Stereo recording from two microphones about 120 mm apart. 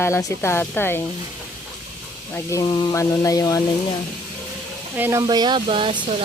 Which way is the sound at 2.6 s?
35° left (ahead or behind).